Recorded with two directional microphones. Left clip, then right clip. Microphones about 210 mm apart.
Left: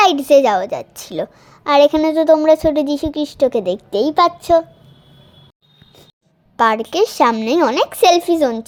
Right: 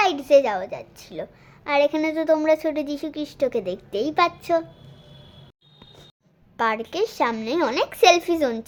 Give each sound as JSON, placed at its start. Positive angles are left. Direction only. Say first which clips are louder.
{"t": 0.0, "sound": "a woman's voice", "louder": "left 6 dB", "side_deg": 35}
{"t": 6.6, "sound": "a woman's voice", "louder": "left 9 dB", "side_deg": 25}